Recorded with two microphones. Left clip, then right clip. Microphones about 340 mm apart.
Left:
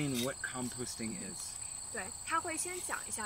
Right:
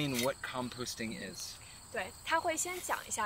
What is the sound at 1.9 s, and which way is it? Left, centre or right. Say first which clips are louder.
Cricket: right 3 dB; right.